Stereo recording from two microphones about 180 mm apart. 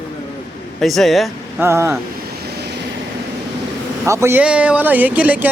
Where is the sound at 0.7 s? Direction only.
Centre (ahead or behind).